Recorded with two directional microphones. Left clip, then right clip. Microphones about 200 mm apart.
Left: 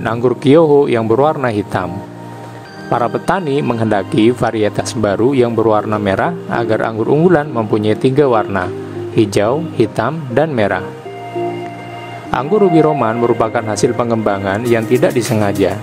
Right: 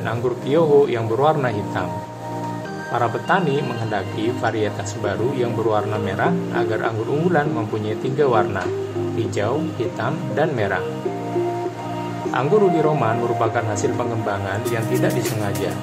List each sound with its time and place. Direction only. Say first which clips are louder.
0.0 s speech: left 9 dB; 45° left (ahead or behind)
2.9 s speech: left 5 dB; 45° left (ahead or behind)
12.3 s speech: left 5 dB; 50° left (ahead or behind)